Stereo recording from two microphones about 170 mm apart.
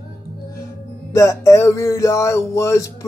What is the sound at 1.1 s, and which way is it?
Music, 15° left (ahead or behind).